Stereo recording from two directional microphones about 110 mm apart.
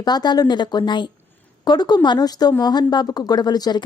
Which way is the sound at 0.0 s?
40° left (ahead or behind).